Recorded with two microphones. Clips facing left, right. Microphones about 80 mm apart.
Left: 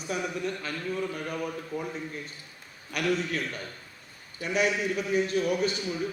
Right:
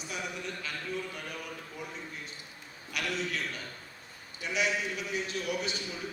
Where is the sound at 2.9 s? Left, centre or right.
Left.